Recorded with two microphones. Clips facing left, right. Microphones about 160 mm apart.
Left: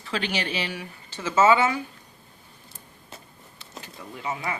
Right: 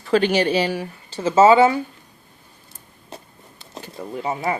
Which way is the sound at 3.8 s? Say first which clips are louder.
Right 9 dB; 35° right (ahead or behind).